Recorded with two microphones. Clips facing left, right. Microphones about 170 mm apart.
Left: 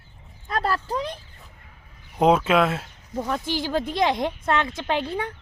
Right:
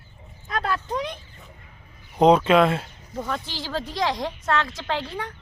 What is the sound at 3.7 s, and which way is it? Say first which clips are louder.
A woman's voice: left 2 dB; 20° left (ahead or behind).